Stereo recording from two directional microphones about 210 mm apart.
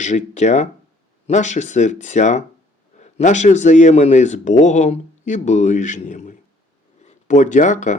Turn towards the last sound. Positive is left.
turn(degrees=35)  # may be behind; listen again after turning